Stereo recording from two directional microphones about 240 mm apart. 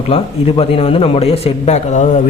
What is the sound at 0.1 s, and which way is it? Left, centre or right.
Speech, left.